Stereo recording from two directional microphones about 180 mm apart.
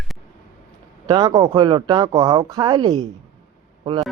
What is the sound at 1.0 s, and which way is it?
Speech, 20° right (ahead or behind).